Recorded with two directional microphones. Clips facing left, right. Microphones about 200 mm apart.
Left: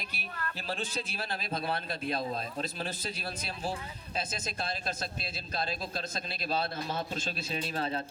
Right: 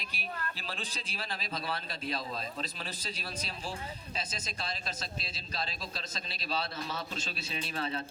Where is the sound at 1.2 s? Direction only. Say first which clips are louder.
Left 2 dB; 55° left (ahead or behind).